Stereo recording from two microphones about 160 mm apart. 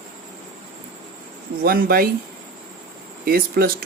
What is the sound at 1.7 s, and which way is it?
Speech, 65° right (ahead or behind).